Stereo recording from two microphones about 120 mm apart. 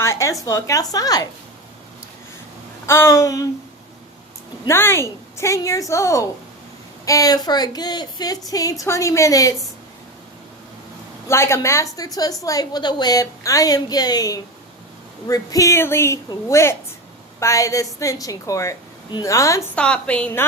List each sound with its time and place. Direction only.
0.0 s a sound: 25° left (ahead or behind)
0.4 s a woman's voice: 30° left (ahead or behind)
2.8 s a woman's voice: 20° left (ahead or behind)
4.7 s a woman's voice: 20° left (ahead or behind)
11.3 s a woman's voice: 25° left (ahead or behind)
19.7 s a woman's voice: 10° left (ahead or behind)